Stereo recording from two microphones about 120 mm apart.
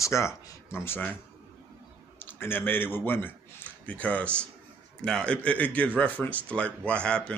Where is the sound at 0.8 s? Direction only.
15° left (ahead or behind).